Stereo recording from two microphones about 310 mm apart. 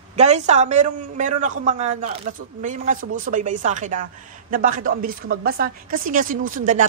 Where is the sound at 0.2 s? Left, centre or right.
Right.